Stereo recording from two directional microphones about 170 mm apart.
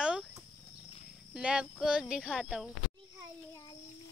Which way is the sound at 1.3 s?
5° right (ahead or behind).